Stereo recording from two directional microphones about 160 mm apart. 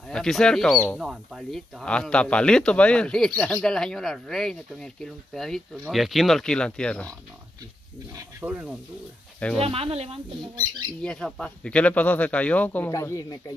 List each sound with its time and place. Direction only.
0.1 s speech: 5° left (ahead or behind)
8.2 s speech: 10° right (ahead or behind)
9.6 s speech: 40° right (ahead or behind)
11.0 s speech: 5° left (ahead or behind)